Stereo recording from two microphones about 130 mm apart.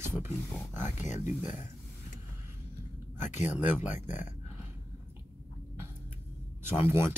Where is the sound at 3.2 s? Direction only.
65° left (ahead or behind).